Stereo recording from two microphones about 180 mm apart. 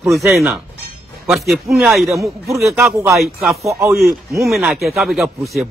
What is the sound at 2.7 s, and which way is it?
Speech, 15° right (ahead or behind).